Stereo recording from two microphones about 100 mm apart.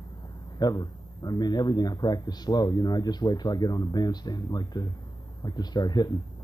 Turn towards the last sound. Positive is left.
turn(degrees=45)  # may be behind; listen again after turning